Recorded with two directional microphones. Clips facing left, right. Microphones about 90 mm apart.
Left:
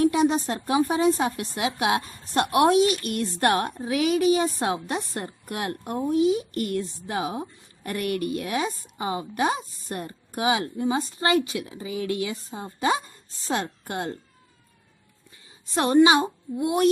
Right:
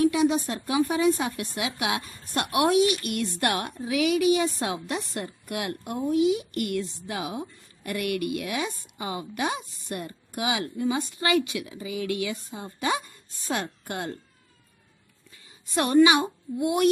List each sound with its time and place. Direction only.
0.0 s a woman's voice: 40° left (ahead or behind)
15.7 s a woman's voice: 25° left (ahead or behind)